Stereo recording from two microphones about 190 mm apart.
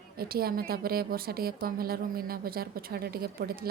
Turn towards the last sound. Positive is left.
turn(degrees=-50)  # may be behind; listen again after turning